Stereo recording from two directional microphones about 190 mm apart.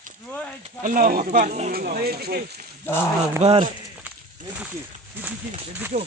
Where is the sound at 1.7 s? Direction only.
50° right (ahead or behind).